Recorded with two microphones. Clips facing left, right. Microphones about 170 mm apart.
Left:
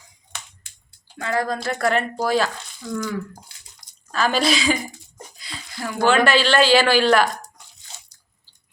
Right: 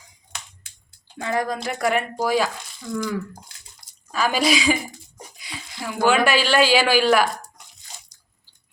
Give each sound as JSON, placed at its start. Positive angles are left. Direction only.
{"t": 1.2, "sound": "speech", "side_deg": -15}
{"t": 4.1, "sound": "speech", "side_deg": -10}